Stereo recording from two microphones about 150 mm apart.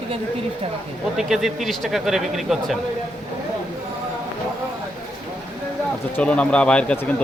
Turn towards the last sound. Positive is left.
turn(degrees=10)  # may be behind; listen again after turning